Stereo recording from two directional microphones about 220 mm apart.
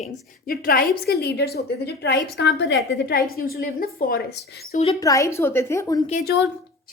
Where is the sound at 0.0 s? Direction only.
40° left (ahead or behind).